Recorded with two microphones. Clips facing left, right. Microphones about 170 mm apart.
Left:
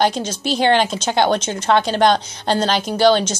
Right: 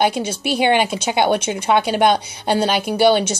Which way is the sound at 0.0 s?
10° right (ahead or behind).